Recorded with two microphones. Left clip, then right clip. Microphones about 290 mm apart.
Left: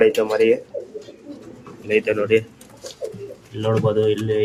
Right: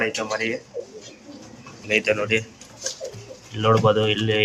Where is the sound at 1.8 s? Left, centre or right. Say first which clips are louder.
Left 2 dB; centre.